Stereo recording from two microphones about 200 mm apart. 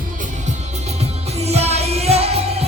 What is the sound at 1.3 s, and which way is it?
Music, 30° right (ahead or behind).